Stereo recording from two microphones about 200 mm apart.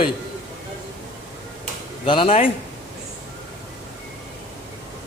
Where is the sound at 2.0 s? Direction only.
25° left (ahead or behind).